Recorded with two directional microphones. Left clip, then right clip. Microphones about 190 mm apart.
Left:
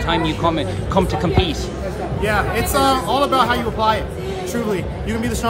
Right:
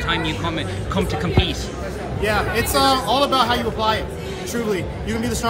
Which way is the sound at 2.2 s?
Centre (ahead or behind).